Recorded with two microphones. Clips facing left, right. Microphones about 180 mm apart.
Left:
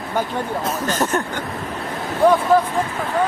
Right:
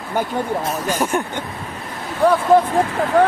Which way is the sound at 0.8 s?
10° right (ahead or behind).